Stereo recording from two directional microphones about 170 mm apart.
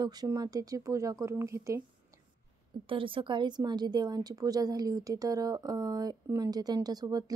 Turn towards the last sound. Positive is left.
turn(degrees=-20)  # may be behind; listen again after turning